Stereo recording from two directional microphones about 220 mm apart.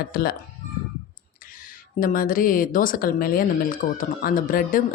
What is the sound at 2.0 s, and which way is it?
Speech, 40° left (ahead or behind).